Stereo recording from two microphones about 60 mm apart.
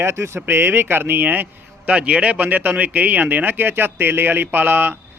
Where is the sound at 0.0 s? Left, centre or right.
Right.